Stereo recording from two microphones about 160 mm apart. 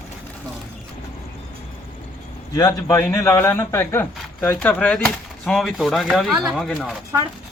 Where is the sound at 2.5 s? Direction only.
20° left (ahead or behind); by 6.9 s centre (ahead or behind).